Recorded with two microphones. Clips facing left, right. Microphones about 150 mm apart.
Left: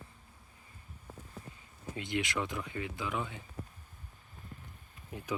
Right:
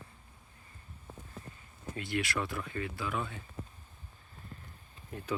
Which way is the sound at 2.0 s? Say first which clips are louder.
Even; 20° left (ahead or behind).